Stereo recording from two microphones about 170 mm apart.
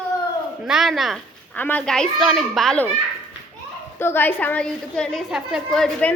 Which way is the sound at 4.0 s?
15° left (ahead or behind).